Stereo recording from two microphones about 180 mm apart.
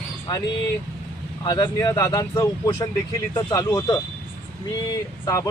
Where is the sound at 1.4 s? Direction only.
25° left (ahead or behind).